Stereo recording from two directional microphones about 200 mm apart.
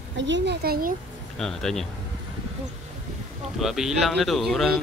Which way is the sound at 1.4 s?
5° left (ahead or behind).